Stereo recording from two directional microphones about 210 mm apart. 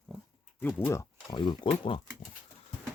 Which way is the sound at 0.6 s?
10° left (ahead or behind).